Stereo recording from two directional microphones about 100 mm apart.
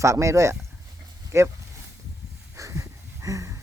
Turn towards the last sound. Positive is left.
turn(degrees=-35)  # may be behind; listen again after turning